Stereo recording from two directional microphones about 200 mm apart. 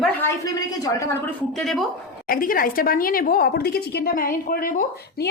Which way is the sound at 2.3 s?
45° left (ahead or behind).